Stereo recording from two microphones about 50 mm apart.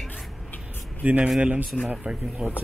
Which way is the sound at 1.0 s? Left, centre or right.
Right.